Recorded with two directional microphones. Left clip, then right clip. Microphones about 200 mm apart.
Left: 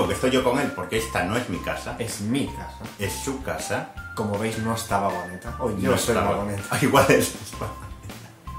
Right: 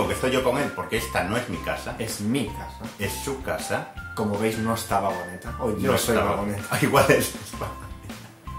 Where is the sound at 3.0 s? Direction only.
Centre (ahead or behind).